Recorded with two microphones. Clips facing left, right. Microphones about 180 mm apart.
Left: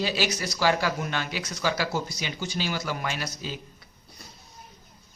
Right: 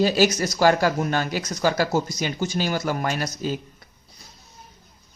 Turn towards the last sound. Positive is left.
turn(degrees=-45)  # may be behind; listen again after turning